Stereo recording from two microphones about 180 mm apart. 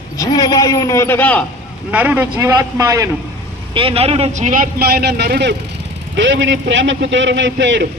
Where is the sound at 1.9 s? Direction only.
10° right (ahead or behind).